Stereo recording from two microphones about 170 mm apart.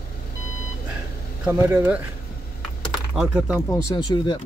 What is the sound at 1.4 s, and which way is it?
Speech, 10° right (ahead or behind).